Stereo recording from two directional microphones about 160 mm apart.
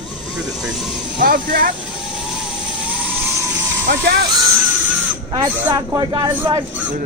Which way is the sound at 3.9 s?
90° right.